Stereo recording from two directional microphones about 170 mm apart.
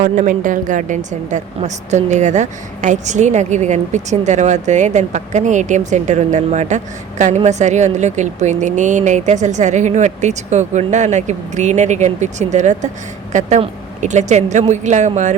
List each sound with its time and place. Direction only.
0.0 s a woman's voice: 50° right (ahead or behind)